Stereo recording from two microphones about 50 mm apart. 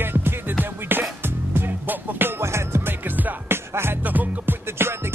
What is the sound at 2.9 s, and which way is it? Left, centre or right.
Music, right.